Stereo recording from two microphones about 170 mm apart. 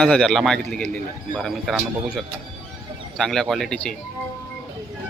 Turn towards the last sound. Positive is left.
turn(degrees=5)  # may be behind; listen again after turning